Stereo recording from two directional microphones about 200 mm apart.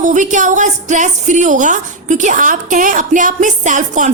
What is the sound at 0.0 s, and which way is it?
A woman's voice, 40° right (ahead or behind).